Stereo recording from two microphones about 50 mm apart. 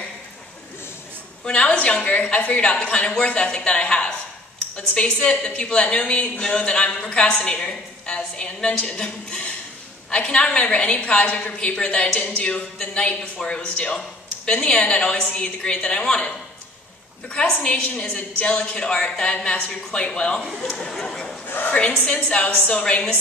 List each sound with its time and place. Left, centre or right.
1.4 s a man's voice: left
17.9 s a man's voice: left
20.7 s speech: centre
21.5 s a woman's voice: left
21.7 s a man's voice: centre